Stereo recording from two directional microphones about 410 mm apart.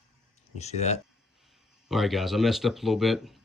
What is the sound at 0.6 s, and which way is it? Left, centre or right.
Speech, centre.